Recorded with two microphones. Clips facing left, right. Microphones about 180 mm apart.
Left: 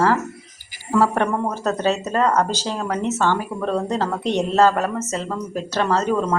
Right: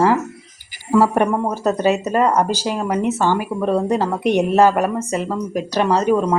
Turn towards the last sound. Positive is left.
turn(degrees=-15)  # may be behind; listen again after turning